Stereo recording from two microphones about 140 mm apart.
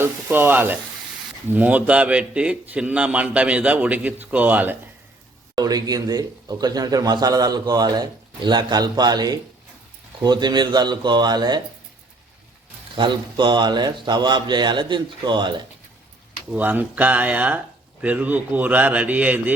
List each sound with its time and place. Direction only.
0.0 s a man's voice: 15° right (ahead or behind)
5.5 s a man's voice: 25° right (ahead or behind)
13.0 s a man's voice: 35° right (ahead or behind)
16.5 s a man's voice: 10° right (ahead or behind)